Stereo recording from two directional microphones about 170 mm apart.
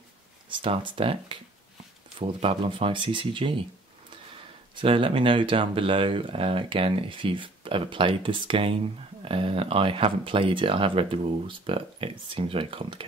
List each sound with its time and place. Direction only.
0.5 s speech: 30° right (ahead or behind)
4.7 s speech: 30° right (ahead or behind)